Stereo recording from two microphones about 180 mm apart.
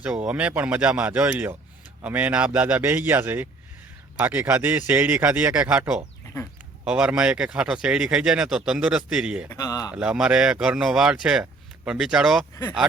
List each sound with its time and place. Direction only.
0.0 s speech: 5° right (ahead or behind)
9.5 s speech: 20° left (ahead or behind)
9.9 s speech: 5° right (ahead or behind)